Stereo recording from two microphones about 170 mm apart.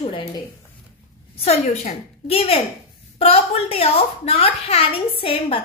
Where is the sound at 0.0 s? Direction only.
30° left (ahead or behind).